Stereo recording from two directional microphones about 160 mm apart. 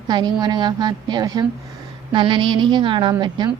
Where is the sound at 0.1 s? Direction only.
25° right (ahead or behind).